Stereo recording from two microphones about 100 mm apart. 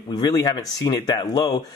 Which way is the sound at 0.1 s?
40° left (ahead or behind).